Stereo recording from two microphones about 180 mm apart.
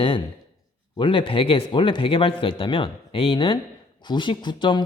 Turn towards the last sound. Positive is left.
turn(degrees=25)  # may be behind; listen again after turning